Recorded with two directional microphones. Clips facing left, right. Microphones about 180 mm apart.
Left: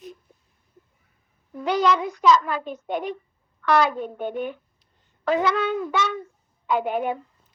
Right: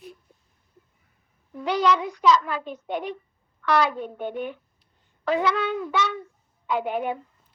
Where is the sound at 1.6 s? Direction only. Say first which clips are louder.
Left 1 dB; 45° left (ahead or behind).